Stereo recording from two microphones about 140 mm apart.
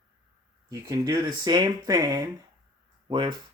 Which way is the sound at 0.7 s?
25° right (ahead or behind).